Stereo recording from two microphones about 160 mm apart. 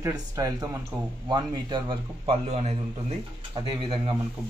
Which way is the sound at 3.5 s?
30° right (ahead or behind).